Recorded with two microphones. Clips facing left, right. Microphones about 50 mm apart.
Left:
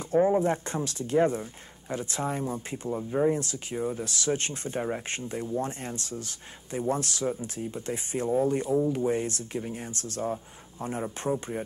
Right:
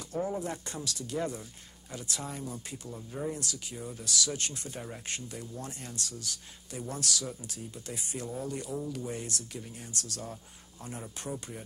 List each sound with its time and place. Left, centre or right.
0.1 s speech: left